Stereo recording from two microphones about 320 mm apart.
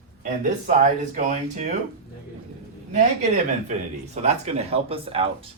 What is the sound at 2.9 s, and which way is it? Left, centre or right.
Speech, right.